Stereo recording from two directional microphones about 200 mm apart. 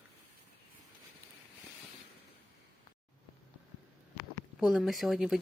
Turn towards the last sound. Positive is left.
turn(degrees=0)  # may be behind; listen again after turning